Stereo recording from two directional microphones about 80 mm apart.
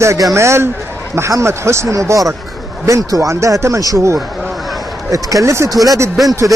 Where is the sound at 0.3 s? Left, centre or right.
Right.